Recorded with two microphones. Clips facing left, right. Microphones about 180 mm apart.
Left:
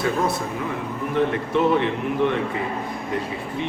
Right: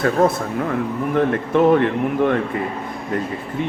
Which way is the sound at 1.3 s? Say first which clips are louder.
Right 5 dB; 50° right (ahead or behind).